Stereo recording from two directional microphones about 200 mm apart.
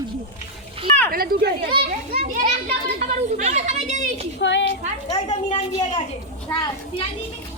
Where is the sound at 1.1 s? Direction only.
50° right (ahead or behind).